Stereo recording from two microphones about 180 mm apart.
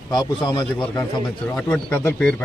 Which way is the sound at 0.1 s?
20° left (ahead or behind).